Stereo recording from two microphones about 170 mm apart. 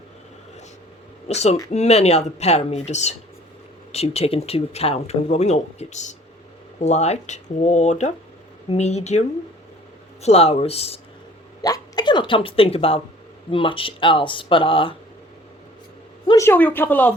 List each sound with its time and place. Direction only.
1.3 s speech: 40° left (ahead or behind)
10.2 s speech: 35° left (ahead or behind)
11.6 s speech: 25° left (ahead or behind)
16.2 s speech: 20° left (ahead or behind)